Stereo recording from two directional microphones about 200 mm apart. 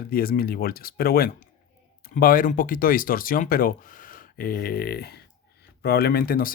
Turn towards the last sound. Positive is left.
turn(degrees=50)  # may be behind; listen again after turning